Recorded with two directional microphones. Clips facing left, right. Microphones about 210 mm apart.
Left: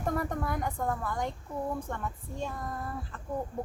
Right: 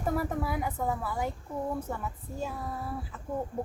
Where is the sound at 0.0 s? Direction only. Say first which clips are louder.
Right 1 dB; 5° right (ahead or behind).